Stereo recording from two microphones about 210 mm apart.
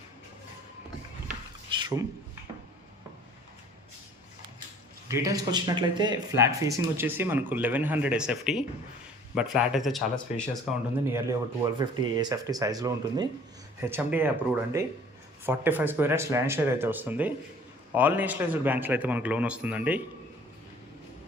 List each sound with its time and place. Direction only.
1.7 s a sound: 20° right (ahead or behind)
5.0 s speech: 15° right (ahead or behind); by 10.6 s centre (ahead or behind)
11.0 s speech: 15° right (ahead or behind)